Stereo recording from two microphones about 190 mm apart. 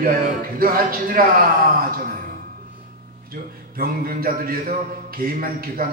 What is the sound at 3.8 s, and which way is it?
A man's voice, 50° right (ahead or behind).